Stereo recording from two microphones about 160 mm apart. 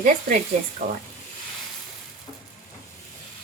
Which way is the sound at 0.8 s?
45° right (ahead or behind).